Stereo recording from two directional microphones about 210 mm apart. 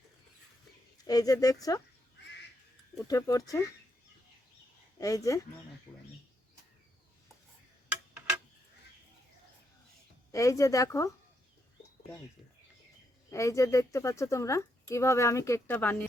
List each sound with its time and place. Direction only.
1.0 s speech: 15° left (ahead or behind)
3.1 s speech: 15° left (ahead or behind)
4.9 s speech: 15° left (ahead or behind)
10.3 s speech: 15° left (ahead or behind)
13.3 s speech: 15° left (ahead or behind)